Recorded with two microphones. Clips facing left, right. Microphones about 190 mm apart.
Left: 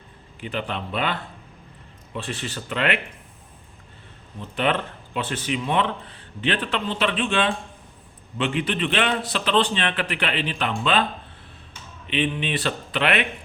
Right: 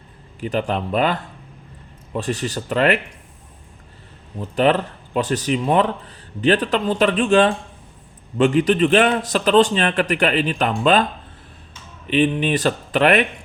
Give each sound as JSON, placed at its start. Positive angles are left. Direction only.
{"t": 0.3, "sound": "speech", "side_deg": -40}
{"t": 4.4, "sound": "a man's voice", "side_deg": -40}
{"t": 12.0, "sound": "a man's voice", "side_deg": -45}